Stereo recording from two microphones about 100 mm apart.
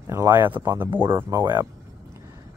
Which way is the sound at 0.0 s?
30° right (ahead or behind).